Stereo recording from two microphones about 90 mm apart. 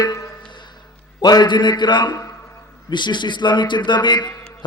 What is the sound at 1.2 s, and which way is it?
A man's voice, 50° left (ahead or behind).